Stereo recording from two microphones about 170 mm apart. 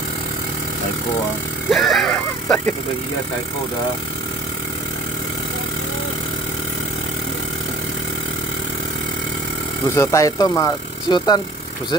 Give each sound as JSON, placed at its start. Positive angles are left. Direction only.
{"t": 1.7, "sound": "speech", "side_deg": 0}
{"t": 9.9, "sound": "speech", "side_deg": 20}